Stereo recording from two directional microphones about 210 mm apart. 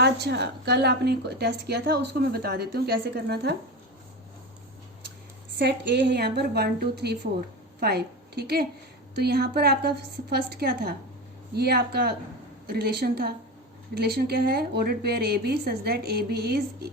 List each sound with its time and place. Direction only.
0.0 s a woman's voice: 50° right (ahead or behind)
5.5 s a woman's voice: 55° right (ahead or behind)